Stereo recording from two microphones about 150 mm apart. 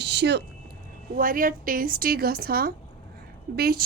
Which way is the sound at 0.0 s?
90° right.